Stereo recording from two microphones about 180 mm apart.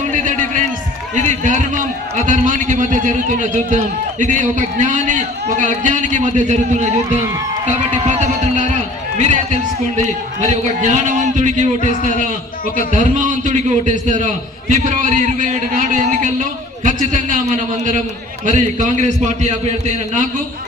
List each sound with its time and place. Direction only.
1.1 s a man's voice: 45° right (ahead or behind)
8.0 s run: 40° right (ahead or behind)
10.4 s a man's voice: 40° right (ahead or behind)
11.8 s a man's voice: 45° left (ahead or behind)
12.9 s a man's voice: 45° right (ahead or behind)